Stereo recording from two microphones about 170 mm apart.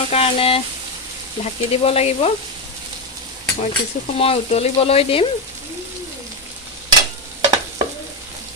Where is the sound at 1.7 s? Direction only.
35° left (ahead or behind).